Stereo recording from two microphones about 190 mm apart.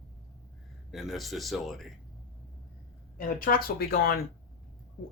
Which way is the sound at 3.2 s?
50° left (ahead or behind).